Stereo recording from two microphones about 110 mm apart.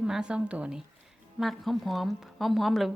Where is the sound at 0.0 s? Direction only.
10° right (ahead or behind).